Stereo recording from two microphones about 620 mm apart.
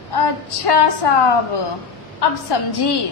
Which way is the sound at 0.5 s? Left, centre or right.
Left.